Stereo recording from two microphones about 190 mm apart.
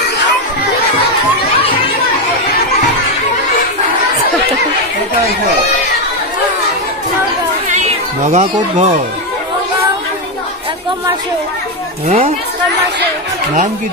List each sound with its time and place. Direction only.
8.3 s speech: 35° right (ahead or behind)